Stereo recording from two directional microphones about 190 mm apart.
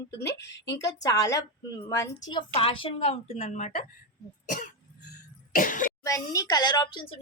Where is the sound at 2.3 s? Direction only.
30° left (ahead or behind).